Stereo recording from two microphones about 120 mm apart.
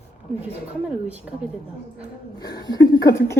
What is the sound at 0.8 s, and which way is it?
Speech, 10° right (ahead or behind).